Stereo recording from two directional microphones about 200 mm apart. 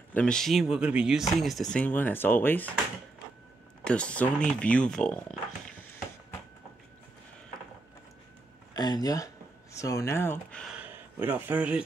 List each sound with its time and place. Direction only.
0.1 s speech: 5° left (ahead or behind)
3.8 s speech: 5° left (ahead or behind)
8.7 s speech: 20° left (ahead or behind); by 10.8 s 5° left (ahead or behind)
10.8 s speech: 10° right (ahead or behind)